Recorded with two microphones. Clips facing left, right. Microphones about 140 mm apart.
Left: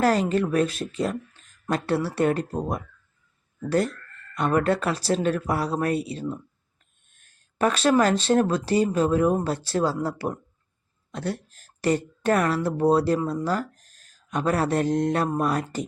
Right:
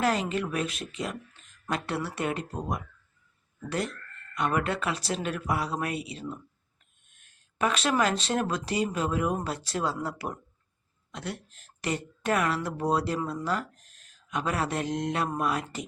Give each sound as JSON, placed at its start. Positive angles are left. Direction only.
{"t": 0.0, "sound": "speech", "side_deg": 40}